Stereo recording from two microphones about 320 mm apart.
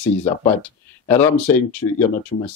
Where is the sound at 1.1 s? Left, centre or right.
Centre.